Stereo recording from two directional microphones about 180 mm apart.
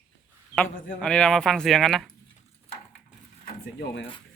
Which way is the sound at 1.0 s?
5° left (ahead or behind).